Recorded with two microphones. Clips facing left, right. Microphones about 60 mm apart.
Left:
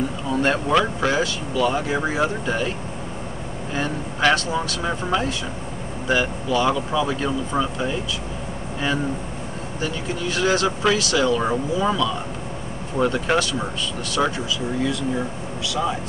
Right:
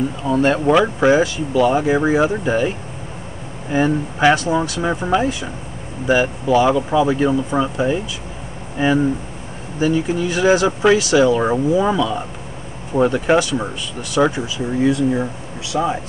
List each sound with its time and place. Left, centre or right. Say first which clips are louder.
0.3 s speech: right 5 dB; centre
0.7 s speech: right 6 dB; centre
3.7 s speech: right 9 dB; centre
14.4 s speech: right 5 dB; right